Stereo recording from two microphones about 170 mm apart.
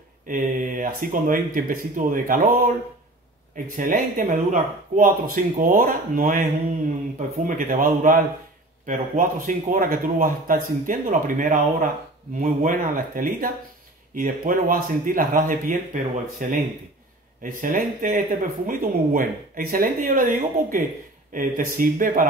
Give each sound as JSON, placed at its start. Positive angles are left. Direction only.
{"t": 0.3, "sound": "speech", "side_deg": -50}